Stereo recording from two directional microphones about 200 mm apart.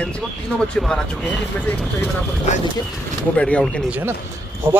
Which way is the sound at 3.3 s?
5° left (ahead or behind).